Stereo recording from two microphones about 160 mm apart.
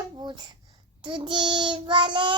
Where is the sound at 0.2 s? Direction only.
25° right (ahead or behind).